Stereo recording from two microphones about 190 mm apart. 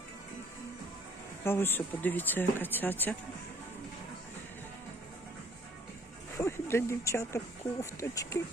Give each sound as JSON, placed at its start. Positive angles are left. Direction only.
{"t": 1.5, "sound": "speech", "side_deg": 10}
{"t": 6.3, "sound": "speech", "side_deg": 15}